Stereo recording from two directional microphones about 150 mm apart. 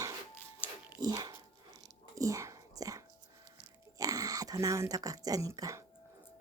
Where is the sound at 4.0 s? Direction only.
25° right (ahead or behind).